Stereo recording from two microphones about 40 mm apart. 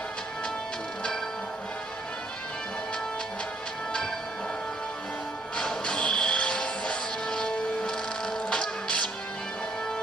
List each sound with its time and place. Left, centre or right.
5.8 s music: left